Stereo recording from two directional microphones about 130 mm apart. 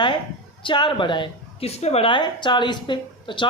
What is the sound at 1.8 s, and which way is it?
Speech, 55° left (ahead or behind).